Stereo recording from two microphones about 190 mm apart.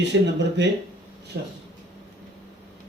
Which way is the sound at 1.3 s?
65° right (ahead or behind).